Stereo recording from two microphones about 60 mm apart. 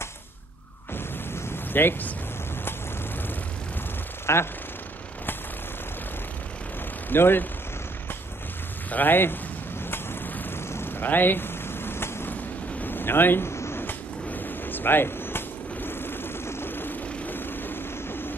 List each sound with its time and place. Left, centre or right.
0.9 s a sound: left
4.3 s speech: left
7.1 s speech: left
8.9 s speech: left
9.8 s vehicle: left
12.8 s a sound: left